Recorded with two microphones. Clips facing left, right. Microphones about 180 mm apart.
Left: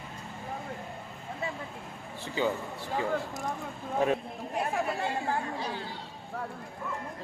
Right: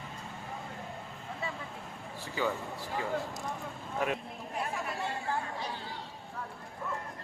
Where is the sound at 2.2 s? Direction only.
25° left (ahead or behind).